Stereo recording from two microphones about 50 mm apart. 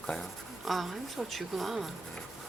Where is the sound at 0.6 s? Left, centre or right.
Centre.